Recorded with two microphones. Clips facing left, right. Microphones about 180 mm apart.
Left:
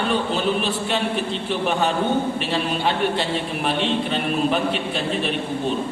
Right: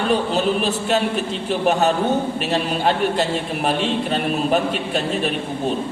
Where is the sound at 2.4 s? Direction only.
45° right (ahead or behind).